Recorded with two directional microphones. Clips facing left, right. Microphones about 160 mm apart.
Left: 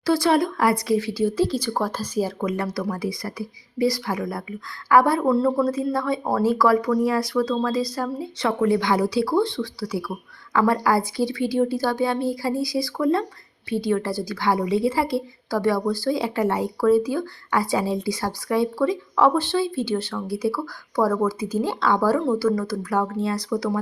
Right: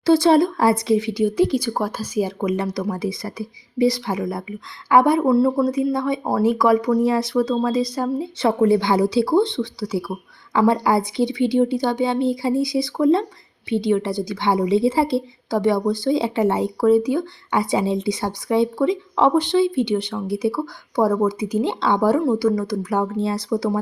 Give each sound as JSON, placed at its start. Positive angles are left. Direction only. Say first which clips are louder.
{"t": 0.0, "sound": "a woman's voice", "louder": "right 5 dB", "side_deg": -25}
{"t": 5.2, "sound": "a woman's voice", "louder": "right 3 dB", "side_deg": -10}